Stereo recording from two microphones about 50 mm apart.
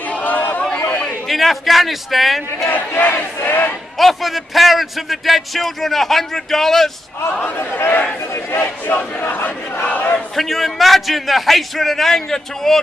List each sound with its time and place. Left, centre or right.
0.1 s chatter: left
1.3 s a man's voice: centre
2.7 s battle cry: left
4.0 s a man's voice: centre
7.5 s battle cry: left
10.3 s a man's voice: centre